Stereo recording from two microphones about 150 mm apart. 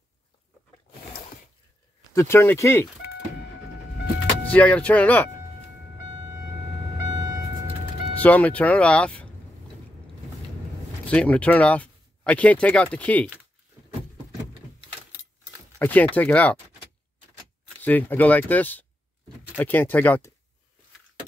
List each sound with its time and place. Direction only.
2.1 s speech: 15° left (ahead or behind)
4.5 s speech: 10° left (ahead or behind)
7.1 s vehicle: 25° right (ahead or behind)
8.2 s speech: 10° left (ahead or behind)
11.1 s speech: 10° left (ahead or behind)
15.8 s speech: 10° left (ahead or behind)
17.8 s speech: 10° left (ahead or behind)